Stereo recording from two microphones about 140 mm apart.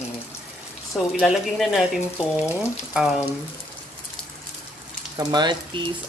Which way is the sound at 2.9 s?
5° right (ahead or behind).